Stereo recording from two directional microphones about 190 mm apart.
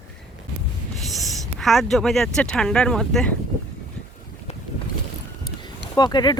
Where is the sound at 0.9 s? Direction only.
Centre (ahead or behind).